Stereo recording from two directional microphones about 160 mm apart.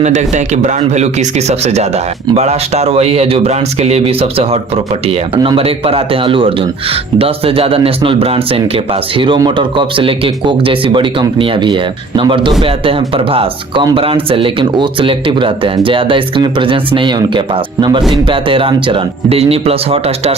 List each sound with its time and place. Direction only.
0.0 s speech: 45° right (ahead or behind)